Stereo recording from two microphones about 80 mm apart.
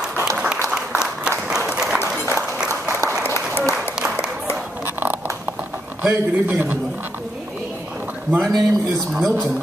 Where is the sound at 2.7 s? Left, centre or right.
Right.